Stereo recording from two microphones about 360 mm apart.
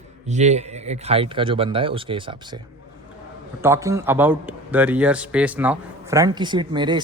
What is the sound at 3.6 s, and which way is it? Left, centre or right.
Speech, centre.